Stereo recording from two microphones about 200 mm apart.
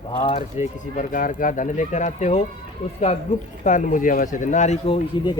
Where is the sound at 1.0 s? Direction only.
40° left (ahead or behind).